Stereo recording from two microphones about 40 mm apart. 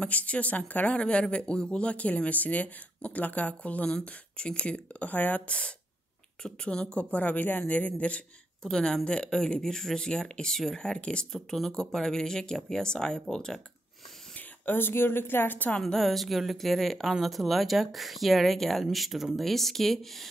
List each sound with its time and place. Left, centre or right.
0.0 s speech: left
0.9 s speech: left
2.0 s speech: left
5.5 s speech: left
8.6 s speech: centre
9.0 s speech: left
11.3 s speech: centre
14.7 s a woman's voice: left
15.8 s speech: centre